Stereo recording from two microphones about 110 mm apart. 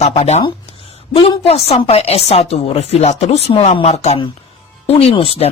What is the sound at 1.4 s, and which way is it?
Speech, 65° left (ahead or behind).